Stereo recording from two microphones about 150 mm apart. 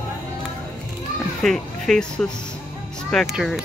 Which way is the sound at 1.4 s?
5° left (ahead or behind).